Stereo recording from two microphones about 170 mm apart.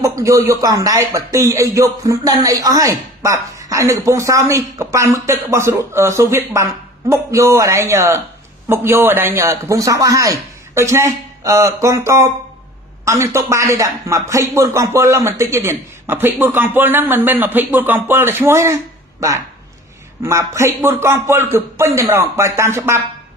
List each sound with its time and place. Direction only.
0.0 s a man's voice: 20° right (ahead or behind)